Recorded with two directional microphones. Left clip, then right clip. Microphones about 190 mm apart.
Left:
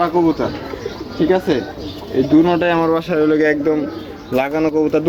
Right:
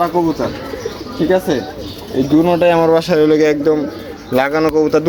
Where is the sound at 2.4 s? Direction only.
35° right (ahead or behind).